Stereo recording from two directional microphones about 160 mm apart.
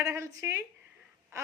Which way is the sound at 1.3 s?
20° right (ahead or behind).